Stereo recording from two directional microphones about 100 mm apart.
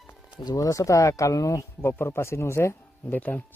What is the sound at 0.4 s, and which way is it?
Speech, 35° left (ahead or behind).